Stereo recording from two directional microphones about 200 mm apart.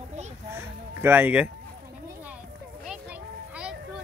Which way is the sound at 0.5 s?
10° right (ahead or behind).